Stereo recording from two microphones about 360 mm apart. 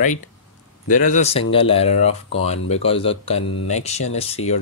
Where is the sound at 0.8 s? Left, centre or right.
Left.